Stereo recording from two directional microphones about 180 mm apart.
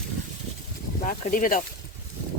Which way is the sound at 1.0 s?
50° left (ahead or behind).